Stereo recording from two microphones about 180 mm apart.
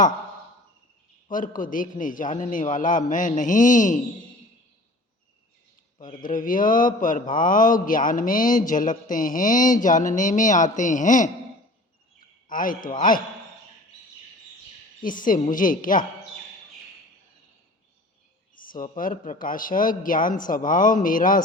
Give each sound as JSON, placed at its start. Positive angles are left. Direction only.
{"t": 1.3, "sound": "a man's voice", "side_deg": 50}
{"t": 6.2, "sound": "a man's voice", "side_deg": 50}
{"t": 12.5, "sound": "a man's voice", "side_deg": 50}
{"t": 15.0, "sound": "a man's voice", "side_deg": 50}
{"t": 18.5, "sound": "a man's voice", "side_deg": 50}